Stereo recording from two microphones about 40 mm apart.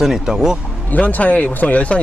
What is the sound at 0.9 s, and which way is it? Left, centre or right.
A man's voice, left.